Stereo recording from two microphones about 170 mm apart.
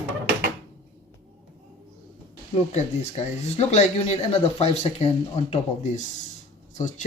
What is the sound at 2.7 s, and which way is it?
Speech, 40° left (ahead or behind).